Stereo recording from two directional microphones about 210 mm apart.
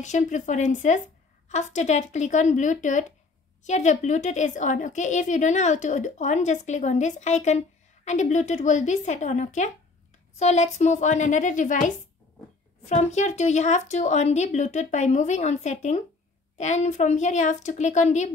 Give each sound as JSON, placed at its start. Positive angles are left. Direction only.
{"t": 0.0, "sound": "a woman's voice", "side_deg": 35}